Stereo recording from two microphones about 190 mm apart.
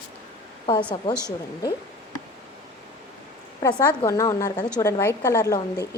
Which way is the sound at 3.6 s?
15° left (ahead or behind).